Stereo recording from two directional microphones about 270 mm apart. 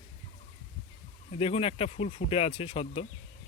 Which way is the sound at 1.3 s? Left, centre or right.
Left.